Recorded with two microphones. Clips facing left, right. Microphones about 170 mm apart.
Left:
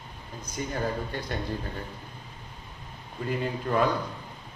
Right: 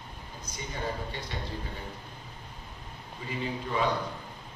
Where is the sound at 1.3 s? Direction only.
50° left (ahead or behind).